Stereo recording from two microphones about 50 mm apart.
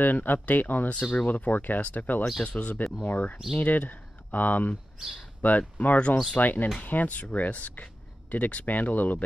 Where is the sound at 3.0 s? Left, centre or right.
Left.